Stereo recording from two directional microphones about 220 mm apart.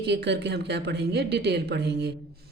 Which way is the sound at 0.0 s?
50° right (ahead or behind).